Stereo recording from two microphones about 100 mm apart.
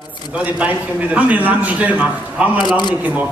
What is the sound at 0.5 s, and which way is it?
A man's voice, 15° right (ahead or behind).